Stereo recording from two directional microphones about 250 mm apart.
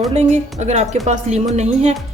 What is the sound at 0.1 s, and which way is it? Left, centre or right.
A woman's voice, right.